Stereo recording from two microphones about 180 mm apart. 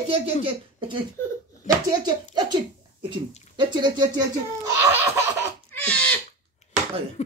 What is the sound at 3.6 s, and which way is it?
Speech, 25° right (ahead or behind).